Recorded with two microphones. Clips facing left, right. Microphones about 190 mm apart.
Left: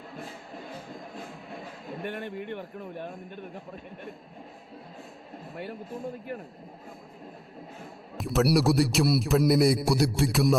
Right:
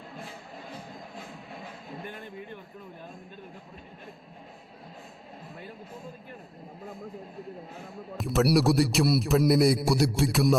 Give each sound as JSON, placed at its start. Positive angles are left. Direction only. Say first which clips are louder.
{"t": 2.0, "sound": "a man's voice", "louder": "left 10 dB", "side_deg": 70}
{"t": 8.2, "sound": "a man's voice", "louder": "even", "side_deg": 0}